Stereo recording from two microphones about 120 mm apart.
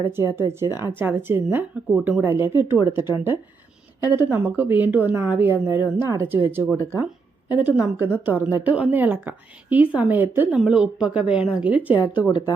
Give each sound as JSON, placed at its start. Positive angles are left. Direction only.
{"t": 0.3, "sound": "a woman's voice", "side_deg": -20}
{"t": 4.1, "sound": "a woman's voice", "side_deg": -15}